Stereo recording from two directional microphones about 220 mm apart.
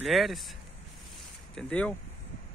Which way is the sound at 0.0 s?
Centre (ahead or behind).